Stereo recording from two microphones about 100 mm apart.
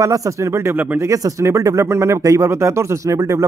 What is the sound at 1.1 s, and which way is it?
Speech, 35° right (ahead or behind).